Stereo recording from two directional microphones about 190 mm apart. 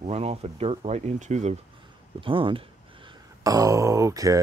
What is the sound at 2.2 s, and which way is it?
Speech, 25° right (ahead or behind).